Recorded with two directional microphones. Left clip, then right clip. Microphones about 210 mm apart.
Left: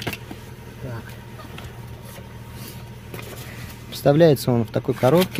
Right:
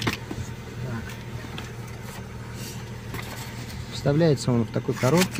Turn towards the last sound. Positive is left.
turn(degrees=35)  # may be behind; listen again after turning